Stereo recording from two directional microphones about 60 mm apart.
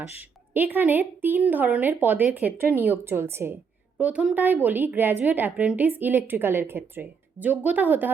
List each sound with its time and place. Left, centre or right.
0.2 s a woman's voice: right
2.7 s speech: right
4.0 s a woman's voice: right